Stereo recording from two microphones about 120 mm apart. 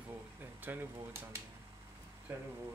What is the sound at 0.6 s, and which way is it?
Speech, 20° right (ahead or behind).